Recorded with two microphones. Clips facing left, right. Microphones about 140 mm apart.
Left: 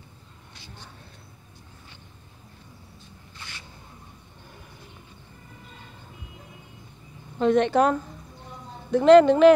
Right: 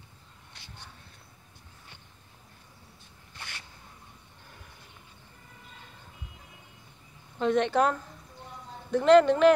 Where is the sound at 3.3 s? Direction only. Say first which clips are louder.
Even; 60° right (ahead or behind).